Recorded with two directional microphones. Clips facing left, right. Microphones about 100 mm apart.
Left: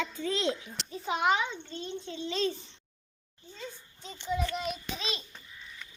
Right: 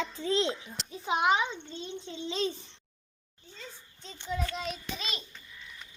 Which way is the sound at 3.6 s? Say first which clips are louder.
Left 4 dB; 5° left (ahead or behind).